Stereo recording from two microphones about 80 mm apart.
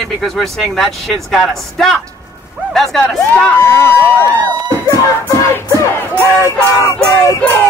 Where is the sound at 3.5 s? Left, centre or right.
Left.